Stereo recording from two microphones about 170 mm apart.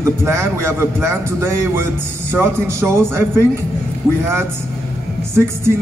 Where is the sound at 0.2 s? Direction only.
15° right (ahead or behind).